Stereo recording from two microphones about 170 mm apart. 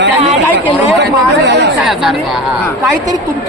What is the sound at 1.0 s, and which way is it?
Speech, 90° right.